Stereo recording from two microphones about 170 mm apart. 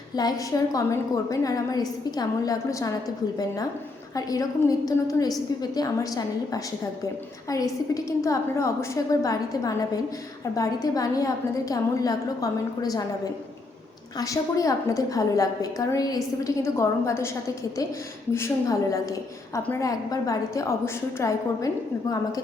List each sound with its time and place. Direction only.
0.2 s a woman's voice: 20° left (ahead or behind)
14.2 s a woman's voice: 20° left (ahead or behind)
18.3 s a woman's voice: 15° left (ahead or behind)